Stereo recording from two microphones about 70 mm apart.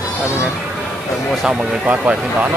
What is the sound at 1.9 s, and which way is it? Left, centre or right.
Speech, right.